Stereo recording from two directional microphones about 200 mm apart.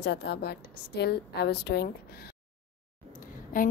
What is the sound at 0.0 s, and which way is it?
A woman's voice, 60° left (ahead or behind).